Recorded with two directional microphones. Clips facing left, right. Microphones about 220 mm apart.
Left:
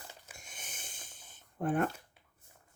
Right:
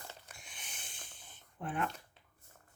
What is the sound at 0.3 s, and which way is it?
Wheeze, 45° left (ahead or behind).